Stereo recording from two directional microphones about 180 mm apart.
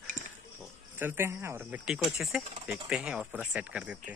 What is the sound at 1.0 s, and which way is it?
Speech, 10° right (ahead or behind).